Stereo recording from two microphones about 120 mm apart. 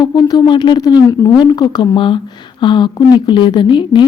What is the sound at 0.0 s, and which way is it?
Speech, 35° left (ahead or behind).